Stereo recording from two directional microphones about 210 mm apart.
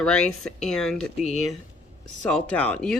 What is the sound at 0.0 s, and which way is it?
Speech, 5° left (ahead or behind).